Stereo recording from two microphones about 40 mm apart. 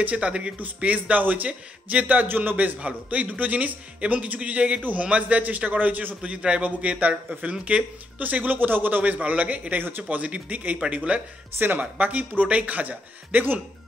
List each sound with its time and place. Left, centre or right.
0.0 s a man's voice: right
2.2 s a man's voice: right
2.8 s a man's voice: right
6.3 s a man's voice: right
11.8 s a man's voice: right